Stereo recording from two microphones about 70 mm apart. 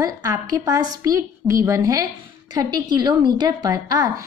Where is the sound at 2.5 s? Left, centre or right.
Right.